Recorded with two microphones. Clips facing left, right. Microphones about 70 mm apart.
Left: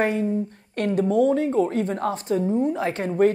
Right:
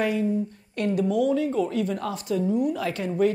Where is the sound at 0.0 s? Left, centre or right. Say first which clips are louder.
Left 2 dB; left.